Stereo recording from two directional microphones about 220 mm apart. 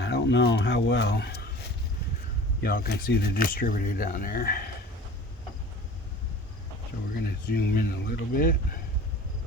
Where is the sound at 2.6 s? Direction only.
45° left (ahead or behind).